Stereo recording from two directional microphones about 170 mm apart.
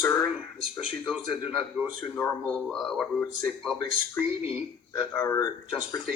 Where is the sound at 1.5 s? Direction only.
5° right (ahead or behind).